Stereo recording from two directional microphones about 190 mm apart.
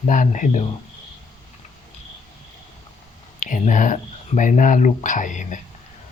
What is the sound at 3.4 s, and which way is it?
Speech, 40° left (ahead or behind).